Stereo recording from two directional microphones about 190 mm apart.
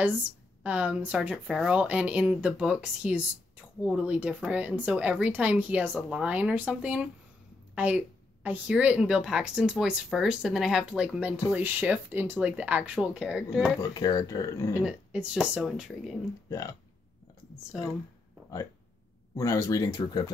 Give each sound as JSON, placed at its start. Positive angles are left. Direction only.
{"t": 0.7, "sound": "a woman's voice", "side_deg": -5}
{"t": 13.7, "sound": "speech", "side_deg": 20}
{"t": 14.9, "sound": "speech", "side_deg": -5}
{"t": 16.4, "sound": "speech", "side_deg": 15}
{"t": 17.7, "sound": "speech", "side_deg": 0}
{"t": 19.3, "sound": "speech", "side_deg": 15}